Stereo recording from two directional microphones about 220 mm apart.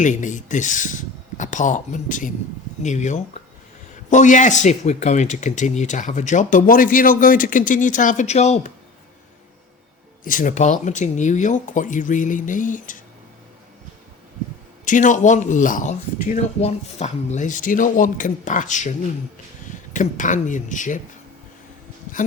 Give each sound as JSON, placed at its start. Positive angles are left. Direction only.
{"t": 0.0, "sound": "speech", "side_deg": 35}
{"t": 10.2, "sound": "speech", "side_deg": 35}
{"t": 14.8, "sound": "speech", "side_deg": 35}